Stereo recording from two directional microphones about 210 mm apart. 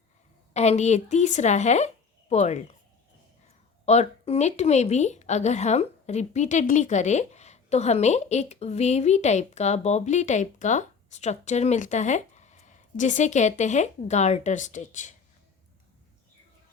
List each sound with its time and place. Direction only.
0.5 s a woman's voice: 30° left (ahead or behind)
3.8 s a woman's voice: 30° left (ahead or behind)